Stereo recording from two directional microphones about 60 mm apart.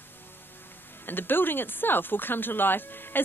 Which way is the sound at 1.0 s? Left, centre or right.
Left.